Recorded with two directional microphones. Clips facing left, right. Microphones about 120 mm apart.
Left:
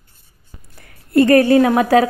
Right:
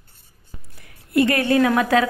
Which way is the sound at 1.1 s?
40° left (ahead or behind).